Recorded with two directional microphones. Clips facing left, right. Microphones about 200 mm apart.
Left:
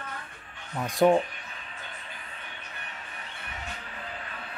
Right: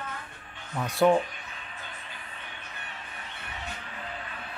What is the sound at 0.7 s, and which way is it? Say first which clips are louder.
Speech: left 1 dB; 15° left (ahead or behind).